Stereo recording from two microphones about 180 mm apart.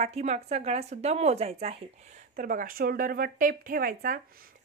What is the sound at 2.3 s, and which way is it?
A woman's voice, 50° right (ahead or behind).